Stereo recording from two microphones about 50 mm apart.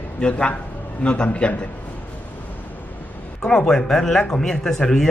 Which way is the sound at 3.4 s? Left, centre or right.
Centre.